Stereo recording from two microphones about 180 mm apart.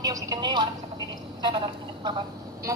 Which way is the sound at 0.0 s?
20° right (ahead or behind).